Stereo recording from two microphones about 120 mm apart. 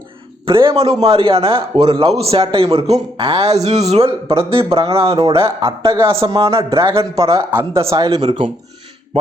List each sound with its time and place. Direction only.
0.4 s a man's voice: 45° right (ahead or behind)
5.9 s speech: 20° right (ahead or behind)
6.1 s a man's voice: 50° right (ahead or behind)
7.0 s speech: 25° right (ahead or behind)
8.2 s a man's voice: 50° right (ahead or behind)